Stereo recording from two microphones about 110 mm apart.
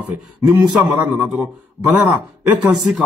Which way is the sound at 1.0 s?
10° right (ahead or behind).